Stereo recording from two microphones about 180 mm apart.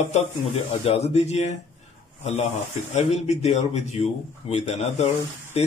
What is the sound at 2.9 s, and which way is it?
A man's voice, 40° left (ahead or behind).